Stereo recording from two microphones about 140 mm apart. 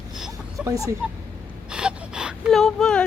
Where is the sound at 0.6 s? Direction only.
20° right (ahead or behind).